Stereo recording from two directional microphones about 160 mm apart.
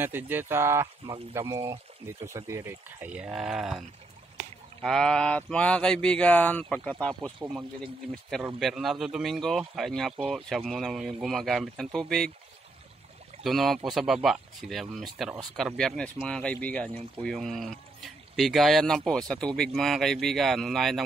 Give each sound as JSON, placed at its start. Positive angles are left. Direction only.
{"t": 0.0, "sound": "speech", "side_deg": -10}
{"t": 4.8, "sound": "speech", "side_deg": 5}
{"t": 13.4, "sound": "speech", "side_deg": 0}